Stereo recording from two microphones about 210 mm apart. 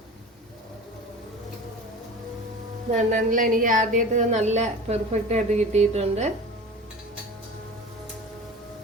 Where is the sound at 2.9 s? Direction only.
40° right (ahead or behind).